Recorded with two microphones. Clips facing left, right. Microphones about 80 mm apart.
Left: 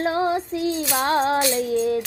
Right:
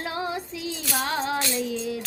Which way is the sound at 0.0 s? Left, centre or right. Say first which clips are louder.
Left 8 dB; left.